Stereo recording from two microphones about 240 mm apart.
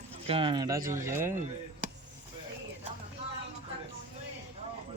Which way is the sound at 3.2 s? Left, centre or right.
Right.